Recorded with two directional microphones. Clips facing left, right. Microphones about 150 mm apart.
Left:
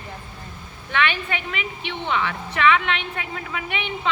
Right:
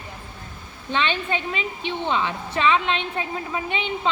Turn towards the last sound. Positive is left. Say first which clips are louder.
# right 2 dB
turn(degrees=-30)  # may be behind; listen again after turning